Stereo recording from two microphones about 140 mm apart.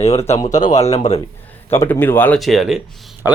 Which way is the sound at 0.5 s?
55° left (ahead or behind).